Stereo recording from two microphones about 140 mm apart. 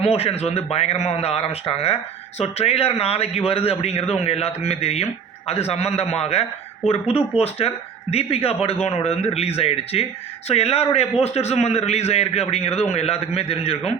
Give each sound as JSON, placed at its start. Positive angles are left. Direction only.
{"t": 0.0, "sound": "a man's voice", "side_deg": 45}